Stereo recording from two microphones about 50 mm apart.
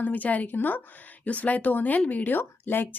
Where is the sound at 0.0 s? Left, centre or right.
Left.